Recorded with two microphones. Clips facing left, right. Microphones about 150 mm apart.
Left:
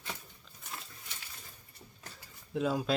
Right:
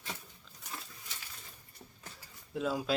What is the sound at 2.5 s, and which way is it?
Speech, 5° right (ahead or behind).